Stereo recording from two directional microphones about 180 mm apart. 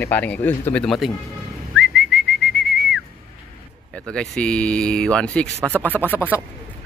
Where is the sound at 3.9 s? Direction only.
5° left (ahead or behind).